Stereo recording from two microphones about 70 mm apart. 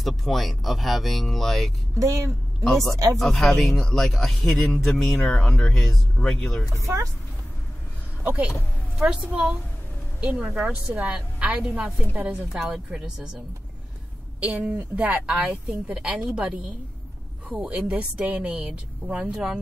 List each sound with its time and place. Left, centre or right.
0.0 s a man's voice: centre
2.0 s speech: right
2.6 s a man's voice: centre
5.3 s speech: centre
8.2 s a woman's voice: right
14.4 s a woman's voice: centre